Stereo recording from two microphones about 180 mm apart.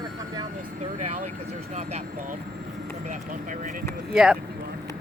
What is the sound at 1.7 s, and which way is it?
Speech, 35° right (ahead or behind).